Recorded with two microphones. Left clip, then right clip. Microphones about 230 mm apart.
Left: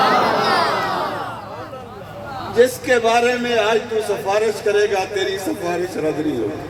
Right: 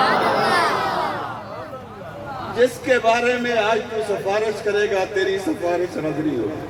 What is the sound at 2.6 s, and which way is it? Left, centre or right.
A man's voice, left.